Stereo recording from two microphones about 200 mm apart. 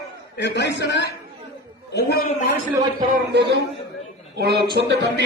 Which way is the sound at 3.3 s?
60° right (ahead or behind).